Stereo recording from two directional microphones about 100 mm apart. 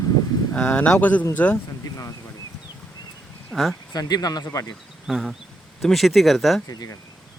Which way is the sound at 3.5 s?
Centre (ahead or behind).